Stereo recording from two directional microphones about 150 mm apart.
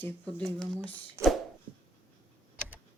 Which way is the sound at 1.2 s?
15° right (ahead or behind).